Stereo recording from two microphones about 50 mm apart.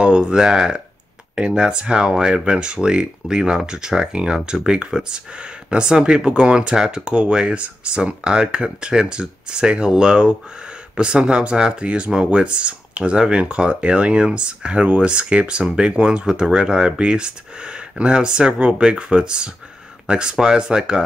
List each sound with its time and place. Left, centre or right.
0.0 s speech: centre